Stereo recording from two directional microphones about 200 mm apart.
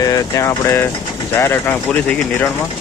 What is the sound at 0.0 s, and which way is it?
Speech, 20° left (ahead or behind).